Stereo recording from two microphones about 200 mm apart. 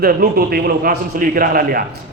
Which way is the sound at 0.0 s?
45° right (ahead or behind).